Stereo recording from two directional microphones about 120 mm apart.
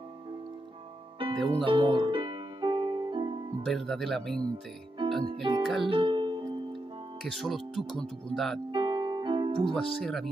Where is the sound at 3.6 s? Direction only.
5° left (ahead or behind).